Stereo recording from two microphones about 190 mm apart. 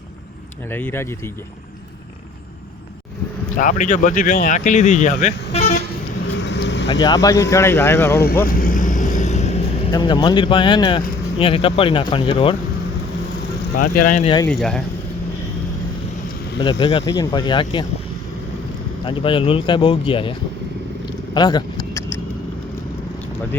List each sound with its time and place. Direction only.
0.7 s speech: 10° left (ahead or behind)
3.5 s speech: 45° left (ahead or behind)
6.3 s vehicle: 65° left (ahead or behind)
7.0 s speech: 20° left (ahead or behind)
8.4 s vehicle: 50° left (ahead or behind)
9.9 s speech: 25° left (ahead or behind)
13.7 s speech: 45° left (ahead or behind)
14.4 s speech: 5° left (ahead or behind)
16.6 s speech: 25° left (ahead or behind)
19.0 s speech: 25° left (ahead or behind)
21.3 s vehicle: 20° left (ahead or behind)